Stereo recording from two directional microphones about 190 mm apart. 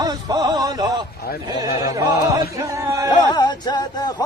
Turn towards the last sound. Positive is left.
turn(degrees=20)  # may be behind; listen again after turning